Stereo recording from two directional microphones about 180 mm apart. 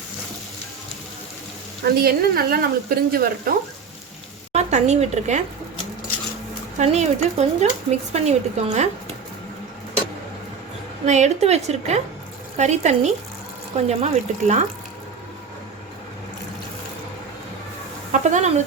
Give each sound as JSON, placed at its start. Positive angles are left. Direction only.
{"t": 1.8, "sound": "a woman's voice", "side_deg": -60}
{"t": 4.5, "sound": "speech", "side_deg": -40}
{"t": 6.7, "sound": "speech", "side_deg": -40}
{"t": 11.0, "sound": "speech", "side_deg": -40}
{"t": 18.1, "sound": "speech", "side_deg": -45}